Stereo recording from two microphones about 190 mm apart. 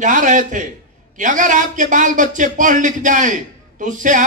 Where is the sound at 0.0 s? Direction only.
40° right (ahead or behind).